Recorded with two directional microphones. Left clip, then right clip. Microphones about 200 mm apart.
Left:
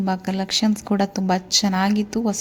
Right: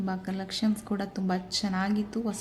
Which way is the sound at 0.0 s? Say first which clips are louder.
Left 10 dB; 35° left (ahead or behind).